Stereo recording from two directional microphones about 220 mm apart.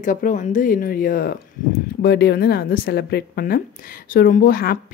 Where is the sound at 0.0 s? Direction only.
35° left (ahead or behind).